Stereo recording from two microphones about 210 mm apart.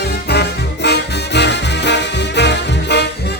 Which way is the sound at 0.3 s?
50° left (ahead or behind).